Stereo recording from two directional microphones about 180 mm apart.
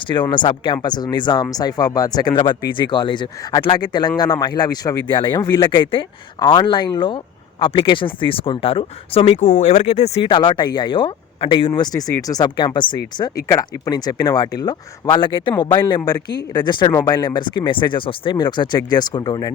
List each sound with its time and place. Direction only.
0.1 s speech: 25° left (ahead or behind)
10.3 s speech: 25° left (ahead or behind)